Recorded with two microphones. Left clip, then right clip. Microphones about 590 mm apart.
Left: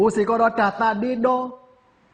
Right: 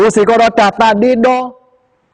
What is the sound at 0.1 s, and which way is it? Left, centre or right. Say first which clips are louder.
A man's voice: right 10 dB; right.